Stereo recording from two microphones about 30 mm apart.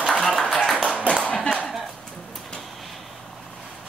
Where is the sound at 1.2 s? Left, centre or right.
Left.